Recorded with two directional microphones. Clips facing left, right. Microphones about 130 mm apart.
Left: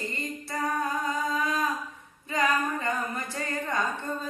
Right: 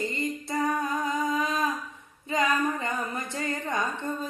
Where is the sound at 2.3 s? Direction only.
20° right (ahead or behind).